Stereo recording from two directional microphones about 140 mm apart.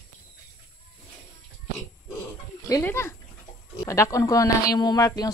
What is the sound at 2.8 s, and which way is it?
Speech, 20° left (ahead or behind).